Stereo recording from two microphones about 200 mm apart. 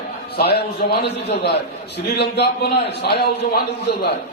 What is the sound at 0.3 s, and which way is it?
A woman's voice, 55° left (ahead or behind).